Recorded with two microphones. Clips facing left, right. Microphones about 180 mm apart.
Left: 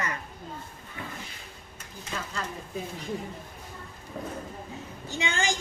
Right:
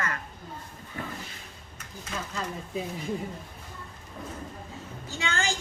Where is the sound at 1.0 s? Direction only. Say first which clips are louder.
Right 3 dB; 40° right (ahead or behind).